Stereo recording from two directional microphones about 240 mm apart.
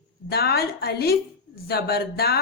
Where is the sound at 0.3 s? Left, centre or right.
Left.